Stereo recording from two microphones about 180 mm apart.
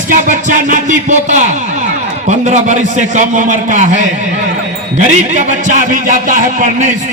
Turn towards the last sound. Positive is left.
turn(degrees=-45)  # may be behind; listen again after turning